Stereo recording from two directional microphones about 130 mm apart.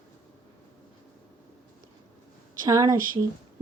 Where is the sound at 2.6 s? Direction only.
30° right (ahead or behind).